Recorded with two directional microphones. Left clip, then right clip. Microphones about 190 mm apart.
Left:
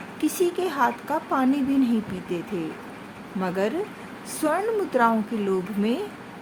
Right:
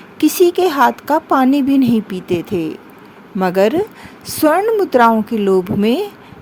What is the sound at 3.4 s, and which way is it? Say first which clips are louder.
A woman's voice: right 12 dB; 55° right (ahead or behind).